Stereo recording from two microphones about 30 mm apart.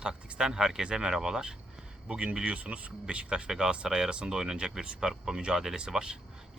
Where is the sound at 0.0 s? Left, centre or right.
Right.